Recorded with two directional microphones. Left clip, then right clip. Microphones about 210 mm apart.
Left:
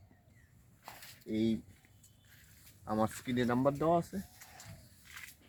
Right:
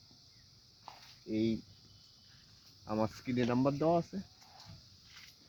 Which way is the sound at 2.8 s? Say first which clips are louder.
Left 1 dB; 20° right (ahead or behind).